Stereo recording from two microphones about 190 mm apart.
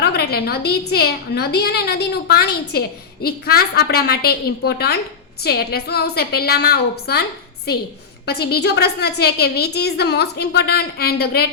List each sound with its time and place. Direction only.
0.0 s a woman's voice: 55° left (ahead or behind)
8.3 s a woman's voice: 60° left (ahead or behind)